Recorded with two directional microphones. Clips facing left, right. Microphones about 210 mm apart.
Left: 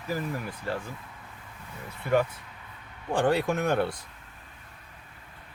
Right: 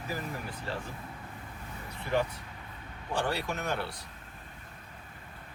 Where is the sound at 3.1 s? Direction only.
50° left (ahead or behind).